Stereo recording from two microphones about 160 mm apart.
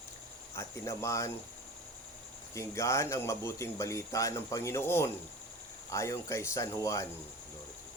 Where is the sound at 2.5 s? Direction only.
20° left (ahead or behind).